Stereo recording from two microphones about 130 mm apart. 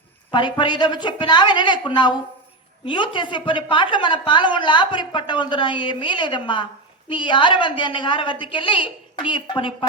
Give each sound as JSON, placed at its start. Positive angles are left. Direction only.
{"t": 0.3, "sound": "a woman's voice", "side_deg": 35}